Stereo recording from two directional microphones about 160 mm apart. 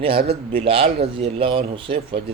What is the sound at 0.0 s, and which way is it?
Speech, 35° right (ahead or behind).